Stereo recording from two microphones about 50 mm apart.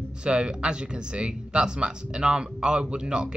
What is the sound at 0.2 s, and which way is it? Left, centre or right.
Speech, centre.